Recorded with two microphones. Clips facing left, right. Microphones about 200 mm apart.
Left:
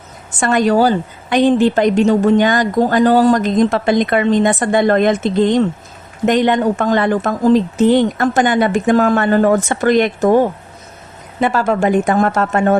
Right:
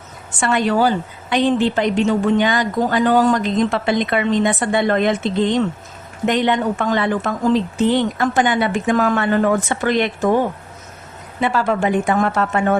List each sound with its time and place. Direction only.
0.3 s a woman's voice: 45° left (ahead or behind)
11.3 s a woman's voice: 45° left (ahead or behind)